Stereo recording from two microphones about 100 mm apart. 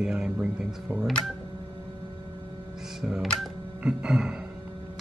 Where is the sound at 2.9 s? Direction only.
5° right (ahead or behind).